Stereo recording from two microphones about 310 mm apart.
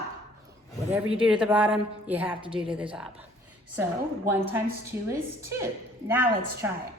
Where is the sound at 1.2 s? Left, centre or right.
Centre.